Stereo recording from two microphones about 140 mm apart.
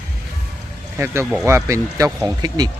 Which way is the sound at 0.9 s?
15° right (ahead or behind).